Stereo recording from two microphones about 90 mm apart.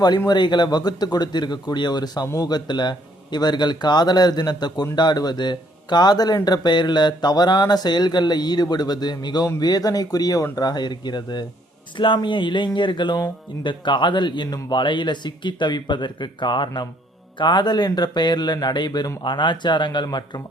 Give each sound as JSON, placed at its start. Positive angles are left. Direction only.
{"t": 0.3, "sound": "speech", "side_deg": 55}